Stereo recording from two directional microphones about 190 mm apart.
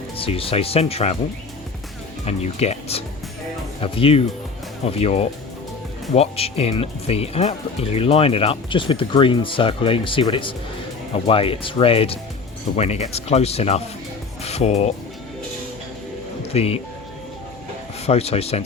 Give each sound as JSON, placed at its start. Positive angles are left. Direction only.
{"t": 0.2, "sound": "speech", "side_deg": 30}
{"t": 2.2, "sound": "speech", "side_deg": 35}
{"t": 16.5, "sound": "speech", "side_deg": 30}
{"t": 18.0, "sound": "speech", "side_deg": 30}